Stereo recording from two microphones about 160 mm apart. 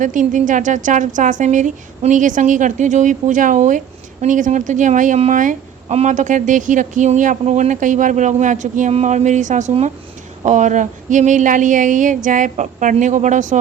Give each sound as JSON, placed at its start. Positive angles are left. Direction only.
{"t": 0.0, "sound": "speech", "side_deg": -55}